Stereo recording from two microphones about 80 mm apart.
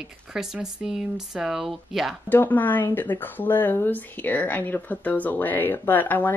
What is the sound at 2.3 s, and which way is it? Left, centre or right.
Speech, left.